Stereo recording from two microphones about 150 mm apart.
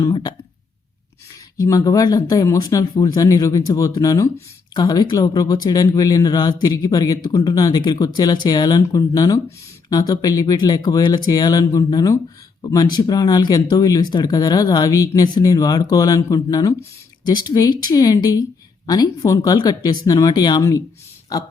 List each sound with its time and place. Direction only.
0.0 s speech: 30° left (ahead or behind)
1.5 s speech: 25° left (ahead or behind)